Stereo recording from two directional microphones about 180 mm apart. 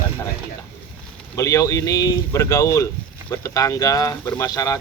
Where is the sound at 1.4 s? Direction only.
20° left (ahead or behind).